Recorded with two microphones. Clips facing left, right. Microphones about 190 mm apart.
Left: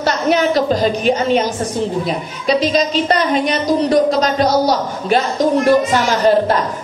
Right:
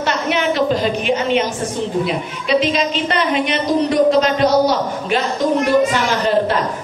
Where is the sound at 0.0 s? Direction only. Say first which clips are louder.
Left 4 dB; 40° left (ahead or behind).